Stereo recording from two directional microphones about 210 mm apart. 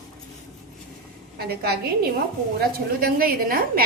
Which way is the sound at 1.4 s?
45° right (ahead or behind).